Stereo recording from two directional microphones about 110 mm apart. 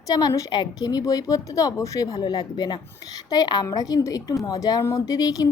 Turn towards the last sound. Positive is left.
turn(degrees=35)  # may be behind; listen again after turning